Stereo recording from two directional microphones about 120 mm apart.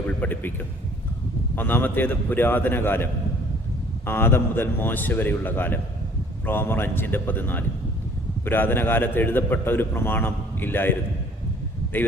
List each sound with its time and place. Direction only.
0.2 s a man's voice: 15° left (ahead or behind)
1.5 s a man's voice: 15° left (ahead or behind)